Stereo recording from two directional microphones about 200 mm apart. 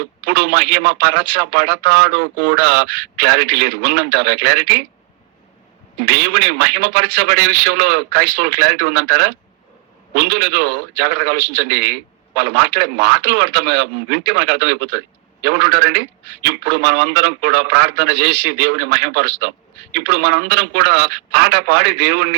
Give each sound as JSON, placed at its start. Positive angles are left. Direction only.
{"t": 0.3, "sound": "a man's voice", "side_deg": -55}
{"t": 6.1, "sound": "a man's voice", "side_deg": -55}